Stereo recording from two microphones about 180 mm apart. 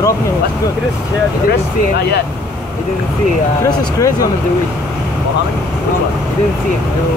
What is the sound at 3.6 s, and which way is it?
Speech, 20° left (ahead or behind).